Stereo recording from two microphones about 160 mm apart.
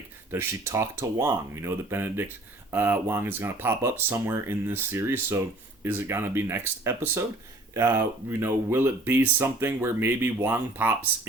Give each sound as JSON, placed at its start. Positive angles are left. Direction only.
{"t": 0.3, "sound": "speech", "side_deg": -15}